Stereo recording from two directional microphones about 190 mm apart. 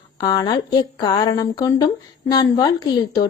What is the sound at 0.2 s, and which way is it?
A woman's voice, 20° left (ahead or behind).